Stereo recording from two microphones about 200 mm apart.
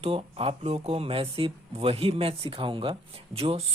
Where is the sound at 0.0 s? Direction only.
30° right (ahead or behind).